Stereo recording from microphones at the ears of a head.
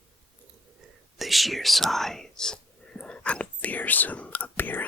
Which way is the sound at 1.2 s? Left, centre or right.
Centre.